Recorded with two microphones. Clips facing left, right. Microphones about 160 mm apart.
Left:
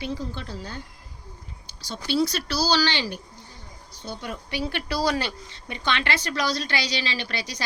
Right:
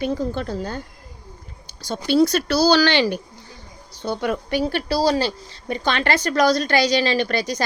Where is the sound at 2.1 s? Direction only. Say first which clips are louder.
Right 7 dB; 50° right (ahead or behind).